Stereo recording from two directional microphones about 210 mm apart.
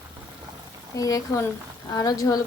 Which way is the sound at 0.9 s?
15° left (ahead or behind).